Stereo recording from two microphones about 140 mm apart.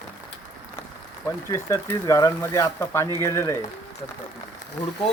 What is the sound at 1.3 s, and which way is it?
Speech, 20° left (ahead or behind).